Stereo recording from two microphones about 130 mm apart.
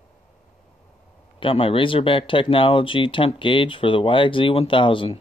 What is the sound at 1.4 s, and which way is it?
Speech, 45° left (ahead or behind).